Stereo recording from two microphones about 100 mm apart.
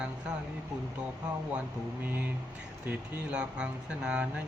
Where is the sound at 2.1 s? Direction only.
20° right (ahead or behind).